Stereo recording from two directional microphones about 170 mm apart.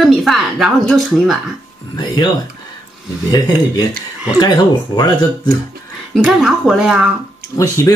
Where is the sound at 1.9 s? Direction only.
25° left (ahead or behind).